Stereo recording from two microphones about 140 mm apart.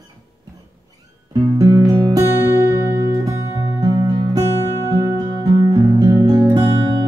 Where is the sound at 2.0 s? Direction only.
25° right (ahead or behind).